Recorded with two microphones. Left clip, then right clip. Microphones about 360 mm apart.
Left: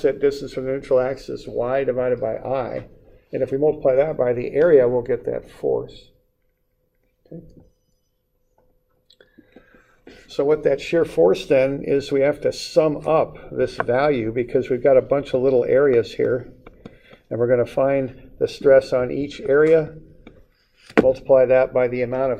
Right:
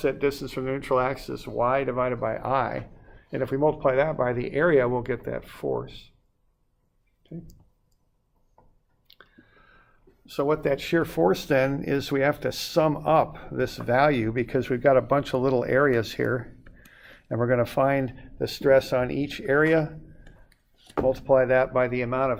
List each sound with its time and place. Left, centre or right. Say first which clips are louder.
0.3 s speech: left 5 dB; right
1.5 s speech: left 3 dB; right
3.3 s speech: left 4 dB; right
10.5 s speech: left 6 dB; right
21.2 s speech: left 3 dB; right